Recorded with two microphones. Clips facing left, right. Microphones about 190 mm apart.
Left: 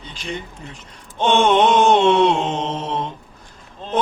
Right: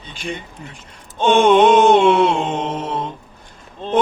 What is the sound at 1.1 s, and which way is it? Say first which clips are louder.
Mantra: right 3 dB; 10° right (ahead or behind).